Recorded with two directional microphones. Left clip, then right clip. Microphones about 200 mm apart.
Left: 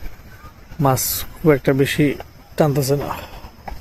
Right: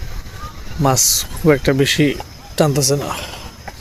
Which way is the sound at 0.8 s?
Centre (ahead or behind).